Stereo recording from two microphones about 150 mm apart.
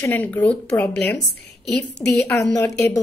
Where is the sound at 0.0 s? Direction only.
10° left (ahead or behind).